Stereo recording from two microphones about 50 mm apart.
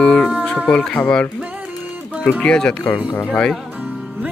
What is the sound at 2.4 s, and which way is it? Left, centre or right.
Speech, centre.